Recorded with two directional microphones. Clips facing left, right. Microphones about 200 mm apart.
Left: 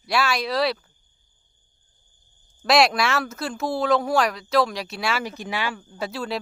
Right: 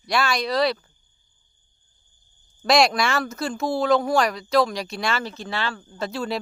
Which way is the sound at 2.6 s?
5° left (ahead or behind).